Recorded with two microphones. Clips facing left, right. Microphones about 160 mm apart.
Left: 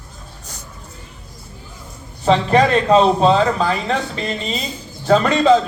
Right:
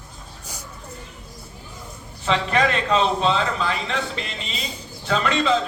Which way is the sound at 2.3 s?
35° left (ahead or behind).